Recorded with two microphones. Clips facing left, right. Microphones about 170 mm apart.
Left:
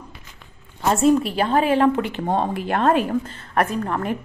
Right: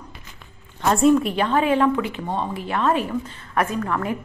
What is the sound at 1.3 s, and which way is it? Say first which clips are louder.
Speech: left 1 dB; 35° left (ahead or behind).